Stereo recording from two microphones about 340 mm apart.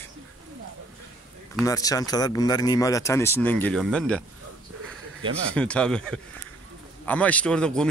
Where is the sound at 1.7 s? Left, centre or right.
Centre.